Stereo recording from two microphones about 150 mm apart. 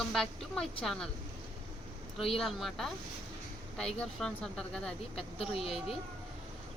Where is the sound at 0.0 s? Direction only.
5° left (ahead or behind).